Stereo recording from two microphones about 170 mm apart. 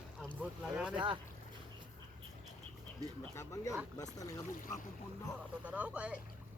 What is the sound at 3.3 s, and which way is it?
Speech, 15° left (ahead or behind).